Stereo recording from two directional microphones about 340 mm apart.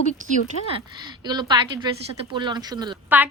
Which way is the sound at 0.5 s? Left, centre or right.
Left.